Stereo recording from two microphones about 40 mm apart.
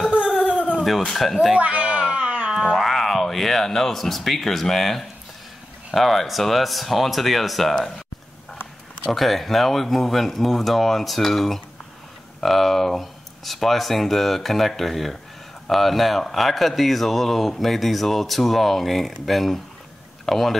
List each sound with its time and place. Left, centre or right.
0.7 s speech: centre
1.5 s a sound: right
2.7 s speech: centre
9.1 s speech: centre